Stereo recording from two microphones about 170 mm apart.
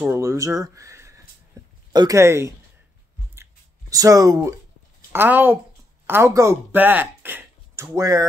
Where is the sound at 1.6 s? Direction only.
20° right (ahead or behind).